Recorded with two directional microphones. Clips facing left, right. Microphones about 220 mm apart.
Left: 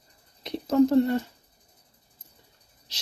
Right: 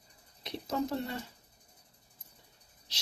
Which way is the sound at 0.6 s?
50° left (ahead or behind).